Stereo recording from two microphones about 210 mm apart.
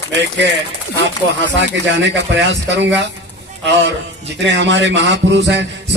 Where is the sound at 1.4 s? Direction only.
55° right (ahead or behind).